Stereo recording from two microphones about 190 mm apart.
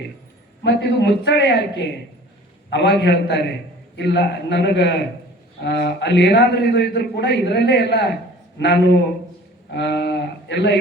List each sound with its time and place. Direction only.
0.6 s a man's voice: 65° left (ahead or behind)
2.6 s a man's voice: 65° left (ahead or behind)